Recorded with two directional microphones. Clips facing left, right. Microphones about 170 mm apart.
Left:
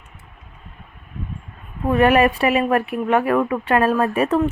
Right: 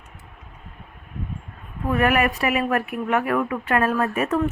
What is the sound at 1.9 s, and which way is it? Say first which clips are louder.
A woman's voice: left 5 dB; 30° left (ahead or behind).